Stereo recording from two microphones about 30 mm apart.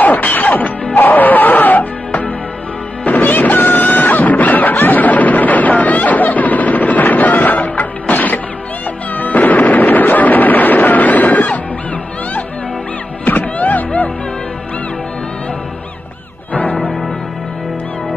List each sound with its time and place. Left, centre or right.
0.0 s music: left
0.9 s music: left
3.2 s a sound: left
9.1 s music: left
13.2 s music: left